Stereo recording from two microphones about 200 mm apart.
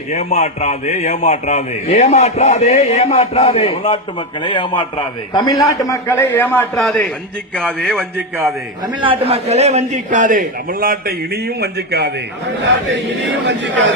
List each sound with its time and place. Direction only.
0.1 s a man's voice: 35° left (ahead or behind); by 8.0 s 5° left (ahead or behind)
9.0 s a man's voice: 25° right (ahead or behind); by 12.1 s 55° right (ahead or behind)
13.5 s speech: 65° right (ahead or behind)